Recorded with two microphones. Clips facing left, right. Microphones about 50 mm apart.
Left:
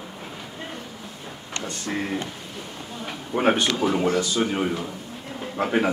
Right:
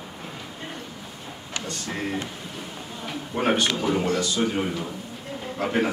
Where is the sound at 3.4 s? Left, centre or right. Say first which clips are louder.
Left 2 dB; centre.